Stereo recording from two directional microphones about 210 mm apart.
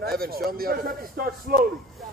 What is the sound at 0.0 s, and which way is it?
A man's voice, 45° right (ahead or behind).